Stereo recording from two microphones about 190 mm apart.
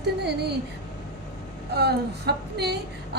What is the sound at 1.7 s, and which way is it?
A woman's voice, 60° right (ahead or behind).